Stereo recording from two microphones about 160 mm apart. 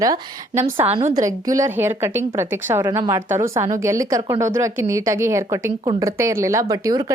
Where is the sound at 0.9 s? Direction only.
45° right (ahead or behind).